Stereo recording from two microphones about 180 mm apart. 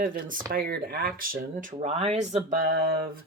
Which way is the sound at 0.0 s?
50° right (ahead or behind).